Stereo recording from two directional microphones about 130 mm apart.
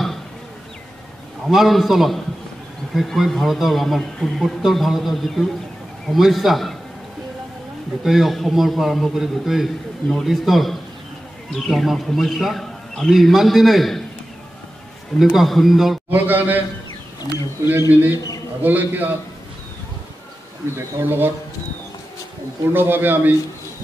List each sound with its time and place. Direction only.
1.4 s a man's voice: centre (ahead or behind)
8.0 s a man's voice: centre (ahead or behind)
15.1 s a man's voice: centre (ahead or behind)
16.1 s a man's voice: 15° right (ahead or behind)
18.1 s a man's voice: 30° left (ahead or behind)
18.6 s a man's voice: 15° right (ahead or behind)
20.7 s a man's voice: 20° right (ahead or behind)
22.7 s a man's voice: 15° right (ahead or behind)